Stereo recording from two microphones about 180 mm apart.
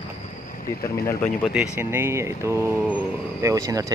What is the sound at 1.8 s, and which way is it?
Speech, 15° right (ahead or behind).